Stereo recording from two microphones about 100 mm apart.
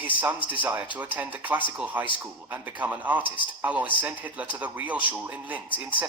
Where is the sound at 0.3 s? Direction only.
55° left (ahead or behind).